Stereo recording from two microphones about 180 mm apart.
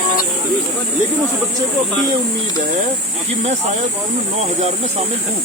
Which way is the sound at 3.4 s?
35° right (ahead or behind).